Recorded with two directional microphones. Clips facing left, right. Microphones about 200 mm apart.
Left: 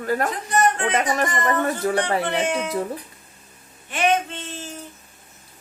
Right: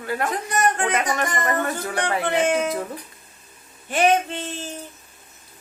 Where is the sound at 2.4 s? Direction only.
45° right (ahead or behind).